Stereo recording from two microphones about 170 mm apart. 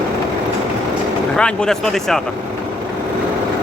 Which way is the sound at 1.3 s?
5° left (ahead or behind).